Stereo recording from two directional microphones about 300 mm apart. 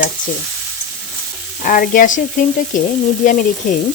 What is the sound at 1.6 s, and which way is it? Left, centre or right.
Sizzle, left.